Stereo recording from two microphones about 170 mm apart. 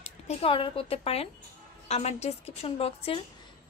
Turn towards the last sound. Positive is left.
turn(degrees=35)  # may be behind; listen again after turning